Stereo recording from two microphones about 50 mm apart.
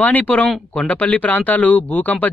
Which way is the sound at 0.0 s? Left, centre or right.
Left.